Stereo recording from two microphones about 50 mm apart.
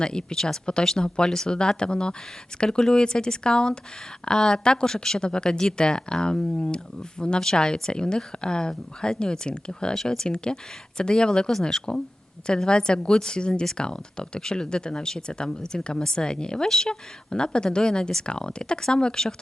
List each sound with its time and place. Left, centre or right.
0.0 s speech: centre